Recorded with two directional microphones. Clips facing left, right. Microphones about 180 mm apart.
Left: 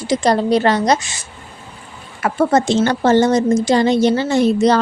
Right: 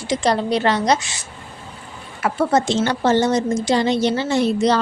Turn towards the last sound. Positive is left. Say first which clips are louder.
# left 4 dB
turn(degrees=45)  # may be behind; listen again after turning